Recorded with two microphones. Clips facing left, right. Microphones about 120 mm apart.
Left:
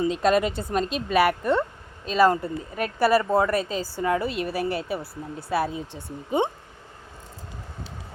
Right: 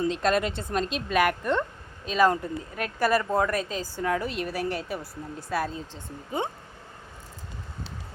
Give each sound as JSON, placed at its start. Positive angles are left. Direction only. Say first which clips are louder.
{"t": 0.0, "sound": "speech", "louder": "left 3 dB", "side_deg": 5}